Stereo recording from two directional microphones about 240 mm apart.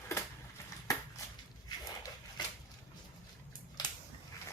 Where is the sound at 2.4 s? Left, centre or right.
Centre.